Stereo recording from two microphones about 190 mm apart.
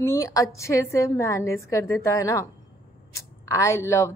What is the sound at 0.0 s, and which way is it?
A woman's voice, 15° left (ahead or behind).